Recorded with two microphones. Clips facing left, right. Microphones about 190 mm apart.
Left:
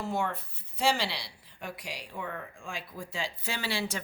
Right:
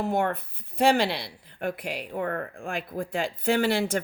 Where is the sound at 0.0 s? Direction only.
60° right (ahead or behind).